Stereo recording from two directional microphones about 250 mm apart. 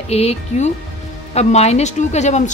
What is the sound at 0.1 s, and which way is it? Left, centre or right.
Speech, left.